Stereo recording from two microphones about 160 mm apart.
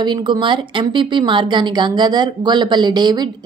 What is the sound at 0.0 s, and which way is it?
Speech, 30° right (ahead or behind).